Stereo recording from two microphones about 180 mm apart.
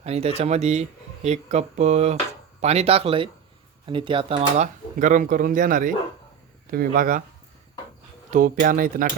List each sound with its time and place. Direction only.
0.0 s speech: 35° right (ahead or behind); by 7.2 s 50° right (ahead or behind)
8.3 s speech: 45° right (ahead or behind)